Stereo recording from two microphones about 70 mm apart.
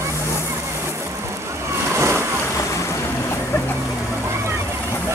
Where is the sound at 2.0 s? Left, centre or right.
Right.